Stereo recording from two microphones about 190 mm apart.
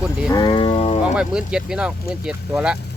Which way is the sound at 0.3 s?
20° left (ahead or behind).